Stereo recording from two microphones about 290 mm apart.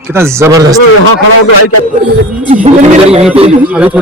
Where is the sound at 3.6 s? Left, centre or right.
Centre.